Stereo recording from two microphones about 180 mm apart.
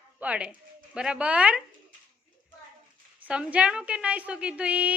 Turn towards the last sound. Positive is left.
turn(degrees=-5)  # may be behind; listen again after turning